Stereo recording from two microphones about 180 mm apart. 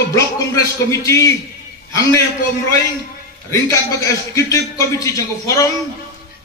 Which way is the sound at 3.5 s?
15° left (ahead or behind).